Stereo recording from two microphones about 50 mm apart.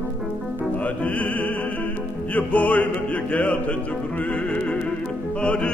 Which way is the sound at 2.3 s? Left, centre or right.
Left.